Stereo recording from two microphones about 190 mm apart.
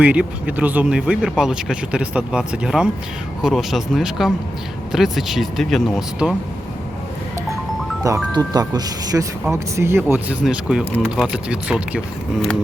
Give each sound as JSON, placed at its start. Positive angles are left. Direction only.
{"t": 0.0, "sound": "speech", "side_deg": -5}
{"t": 8.0, "sound": "speech", "side_deg": -15}